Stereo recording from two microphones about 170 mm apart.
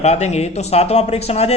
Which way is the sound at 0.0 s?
40° left (ahead or behind).